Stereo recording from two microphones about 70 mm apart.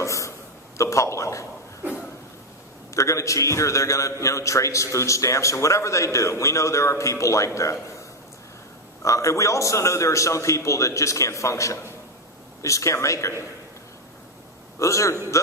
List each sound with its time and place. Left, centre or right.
0.0 s a sound: left
0.8 s a man's voice: left
2.9 s a man's voice: left
9.0 s a man's voice: left
14.8 s a man's voice: left